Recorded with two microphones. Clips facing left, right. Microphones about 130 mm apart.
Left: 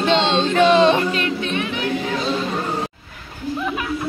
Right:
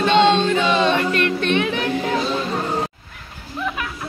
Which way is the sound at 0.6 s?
60° left (ahead or behind).